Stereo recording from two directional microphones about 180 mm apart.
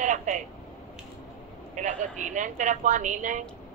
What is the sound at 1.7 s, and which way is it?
A man's voice, 45° right (ahead or behind).